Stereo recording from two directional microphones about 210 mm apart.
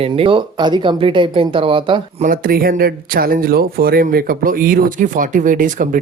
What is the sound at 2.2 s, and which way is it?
Speech, 40° right (ahead or behind).